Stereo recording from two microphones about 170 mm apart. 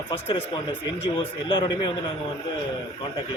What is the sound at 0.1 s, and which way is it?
Speech, 30° left (ahead or behind).